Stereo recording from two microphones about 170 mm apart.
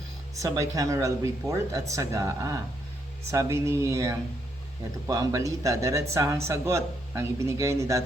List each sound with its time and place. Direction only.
0.3 s speech: 20° right (ahead or behind)